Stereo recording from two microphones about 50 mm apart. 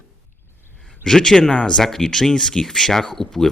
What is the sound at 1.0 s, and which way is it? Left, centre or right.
Speech, centre.